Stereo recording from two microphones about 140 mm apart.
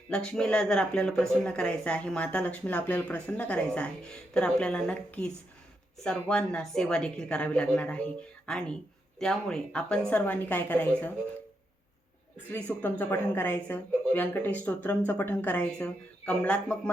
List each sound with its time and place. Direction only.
0.1 s speech: 5° left (ahead or behind)
12.5 s speech: 10° left (ahead or behind)